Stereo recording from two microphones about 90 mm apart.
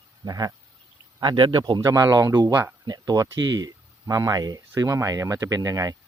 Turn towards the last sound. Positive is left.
turn(degrees=-40)  # may be behind; listen again after turning